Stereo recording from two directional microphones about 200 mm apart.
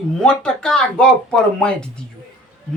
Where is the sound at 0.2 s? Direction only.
5° left (ahead or behind).